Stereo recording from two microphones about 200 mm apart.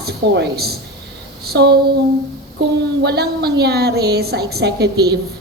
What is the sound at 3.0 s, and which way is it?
A woman's voice, 55° right (ahead or behind).